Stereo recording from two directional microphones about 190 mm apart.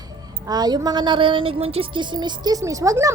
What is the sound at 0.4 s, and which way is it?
A woman's voice, 20° right (ahead or behind).